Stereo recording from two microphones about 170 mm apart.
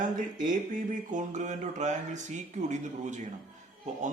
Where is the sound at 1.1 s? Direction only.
45° right (ahead or behind).